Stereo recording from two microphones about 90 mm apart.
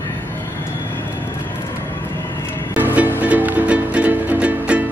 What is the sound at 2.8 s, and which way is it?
Music, 20° right (ahead or behind).